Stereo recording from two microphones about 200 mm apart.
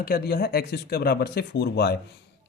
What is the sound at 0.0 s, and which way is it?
Speech, 50° left (ahead or behind).